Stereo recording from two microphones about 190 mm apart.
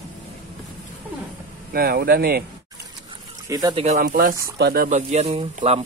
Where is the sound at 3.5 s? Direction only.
20° right (ahead or behind).